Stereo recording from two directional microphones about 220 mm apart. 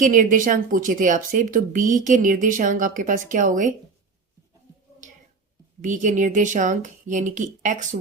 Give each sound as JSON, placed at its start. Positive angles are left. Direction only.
{"t": 0.0, "sound": "speech", "side_deg": -35}
{"t": 5.8, "sound": "speech", "side_deg": -35}